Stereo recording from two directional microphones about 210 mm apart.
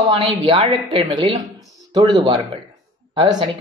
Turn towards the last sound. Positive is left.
turn(degrees=-25)  # may be behind; listen again after turning